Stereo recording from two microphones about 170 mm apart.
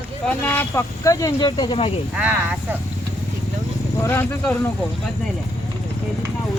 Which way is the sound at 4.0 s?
15° left (ahead or behind).